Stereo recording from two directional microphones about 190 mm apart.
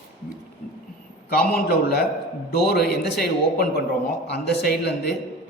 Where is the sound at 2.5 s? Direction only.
55° left (ahead or behind).